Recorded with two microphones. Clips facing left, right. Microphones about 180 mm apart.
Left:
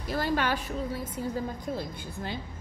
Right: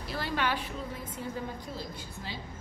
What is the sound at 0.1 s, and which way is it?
Speech, 45° left (ahead or behind).